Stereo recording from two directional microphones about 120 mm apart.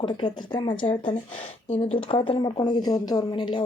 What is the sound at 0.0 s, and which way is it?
Speech, 40° left (ahead or behind).